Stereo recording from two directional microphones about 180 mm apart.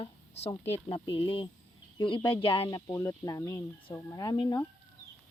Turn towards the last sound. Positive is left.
turn(degrees=20)  # may be behind; listen again after turning